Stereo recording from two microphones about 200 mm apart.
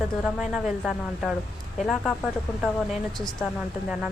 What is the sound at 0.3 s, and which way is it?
Speech, centre (ahead or behind).